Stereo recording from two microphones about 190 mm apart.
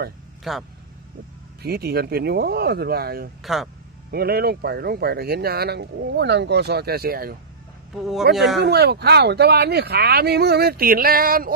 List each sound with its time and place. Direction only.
0.5 s speech: centre (ahead or behind)
1.6 s speech: 55° right (ahead or behind)
3.4 s speech: centre (ahead or behind)
4.1 s speech: 55° right (ahead or behind)
8.3 s speech: centre (ahead or behind)
8.6 s speech: 60° right (ahead or behind)